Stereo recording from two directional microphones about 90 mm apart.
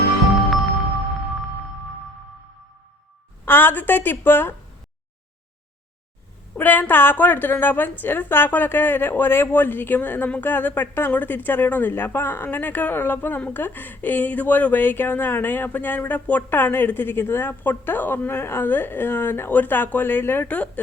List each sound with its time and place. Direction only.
3.4 s a woman's voice: 25° left (ahead or behind)
6.6 s a woman's voice: 20° left (ahead or behind)